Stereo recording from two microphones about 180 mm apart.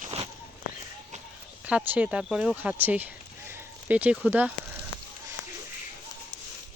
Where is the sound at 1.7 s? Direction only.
10° right (ahead or behind).